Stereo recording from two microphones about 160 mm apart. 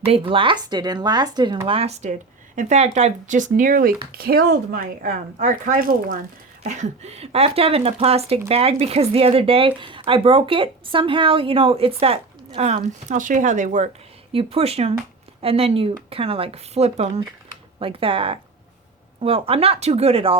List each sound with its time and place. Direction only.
0.0 s speech: 35° right (ahead or behind); by 6.1 s 60° right (ahead or behind)
6.6 s speech: 45° right (ahead or behind)
14.3 s speech: 40° right (ahead or behind)